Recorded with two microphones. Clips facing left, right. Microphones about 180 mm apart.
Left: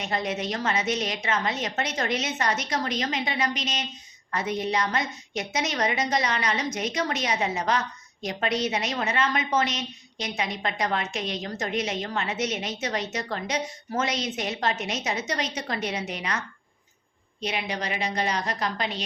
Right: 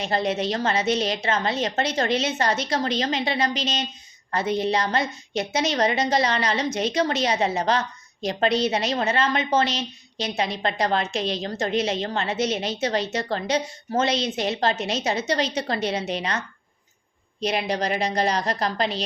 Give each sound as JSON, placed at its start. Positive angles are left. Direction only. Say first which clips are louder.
{"t": 0.0, "sound": "a woman's voice", "louder": "right 5 dB", "side_deg": -30}
{"t": 17.4, "sound": "a woman's voice", "louder": "right 6 dB", "side_deg": -35}